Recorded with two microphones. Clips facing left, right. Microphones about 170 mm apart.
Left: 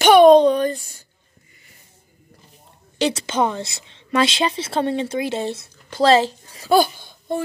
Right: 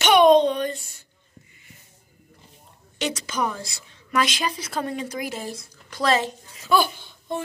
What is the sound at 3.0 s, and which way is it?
A woman's voice, 30° left (ahead or behind).